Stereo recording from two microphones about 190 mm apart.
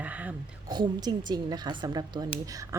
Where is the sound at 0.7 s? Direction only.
20° right (ahead or behind).